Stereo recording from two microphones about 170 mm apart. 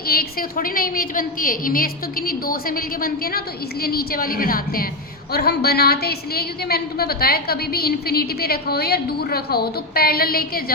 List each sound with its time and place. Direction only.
0.1 s a woman's voice: 60° left (ahead or behind)
5.3 s a woman's voice: 70° left (ahead or behind)